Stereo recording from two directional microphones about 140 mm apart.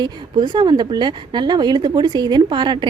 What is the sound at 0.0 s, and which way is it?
Speech, 30° right (ahead or behind).